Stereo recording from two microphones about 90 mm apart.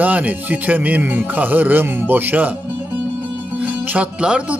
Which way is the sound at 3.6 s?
15° right (ahead or behind).